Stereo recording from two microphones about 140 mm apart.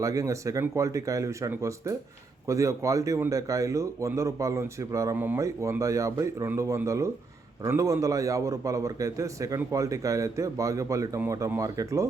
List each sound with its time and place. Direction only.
0.0 s speech: 20° right (ahead or behind)